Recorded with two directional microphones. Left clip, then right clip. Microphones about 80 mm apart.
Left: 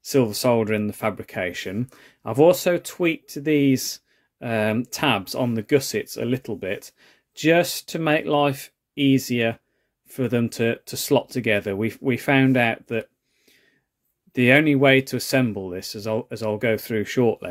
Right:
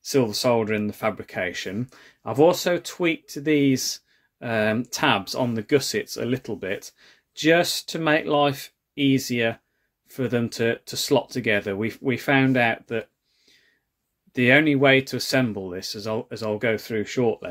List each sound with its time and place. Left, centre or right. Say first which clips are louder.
0.0 s speech: left 1 dB; left
14.3 s speech: left 1 dB; left
16.7 s speech: left 2 dB; left